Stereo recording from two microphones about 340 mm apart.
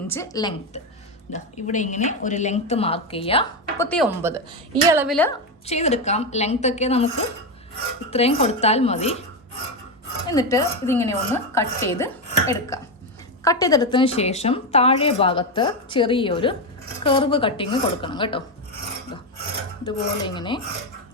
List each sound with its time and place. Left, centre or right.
0.1 s a woman's voice: centre
3.8 s speech: centre
5.6 s speech: centre
8.1 s a woman's voice: centre
10.2 s a woman's voice: centre
19.8 s a woman's voice: centre